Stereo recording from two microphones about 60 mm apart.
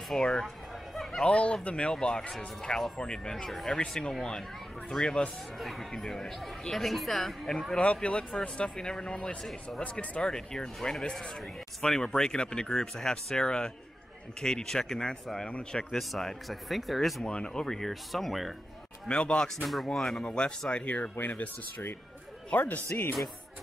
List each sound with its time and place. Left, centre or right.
0.1 s speech: centre
1.2 s speech: centre
7.8 s speech: centre
9.4 s speech: centre
9.8 s speech: centre
16.0 s speech: centre
17.2 s speech: centre
19.0 s speech: centre